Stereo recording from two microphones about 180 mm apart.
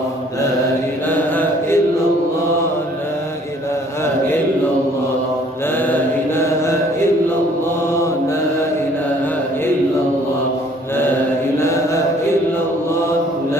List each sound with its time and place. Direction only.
1.1 s mantra: 10° left (ahead or behind)
5.9 s mantra: 15° left (ahead or behind)